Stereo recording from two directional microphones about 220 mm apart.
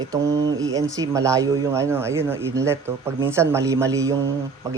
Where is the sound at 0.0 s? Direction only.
15° right (ahead or behind).